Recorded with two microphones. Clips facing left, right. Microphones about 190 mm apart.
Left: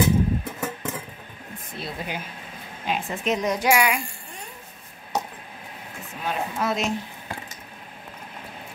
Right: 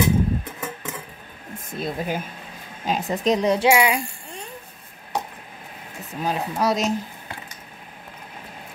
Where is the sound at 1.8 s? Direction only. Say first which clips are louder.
Right 6 dB; 45° right (ahead or behind); by 4.0 s 25° right (ahead or behind).